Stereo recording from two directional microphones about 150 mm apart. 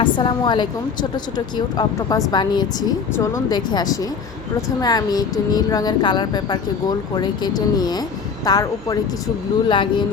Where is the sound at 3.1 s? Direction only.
20° left (ahead or behind).